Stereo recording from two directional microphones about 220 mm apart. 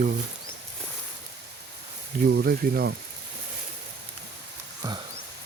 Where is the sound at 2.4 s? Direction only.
45° right (ahead or behind).